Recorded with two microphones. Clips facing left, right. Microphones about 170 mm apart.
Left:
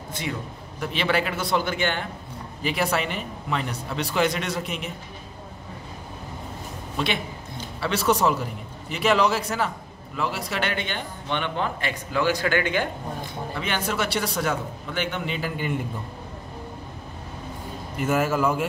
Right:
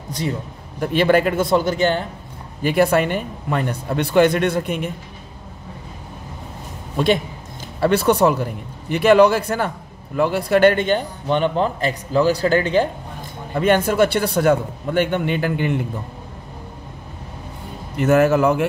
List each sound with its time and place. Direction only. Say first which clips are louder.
0.1 s a man's voice: right 6 dB; 40° right (ahead or behind)
2.6 s speech: right 9 dB; 55° right (ahead or behind)
7.8 s a man's voice: right 7 dB; 55° right (ahead or behind); by 12.8 s 35° right (ahead or behind)
13.6 s speech: right 12 dB; 50° right (ahead or behind)
17.9 s a man's voice: right 8 dB; 70° right (ahead or behind)